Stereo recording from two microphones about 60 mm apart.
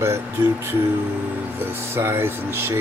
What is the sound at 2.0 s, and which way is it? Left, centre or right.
Speech, right.